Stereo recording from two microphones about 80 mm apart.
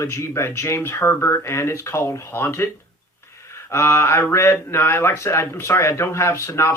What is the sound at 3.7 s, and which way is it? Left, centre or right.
Speech, left.